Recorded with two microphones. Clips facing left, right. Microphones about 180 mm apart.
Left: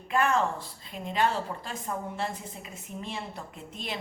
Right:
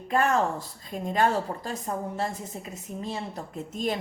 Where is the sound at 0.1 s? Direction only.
40° right (ahead or behind).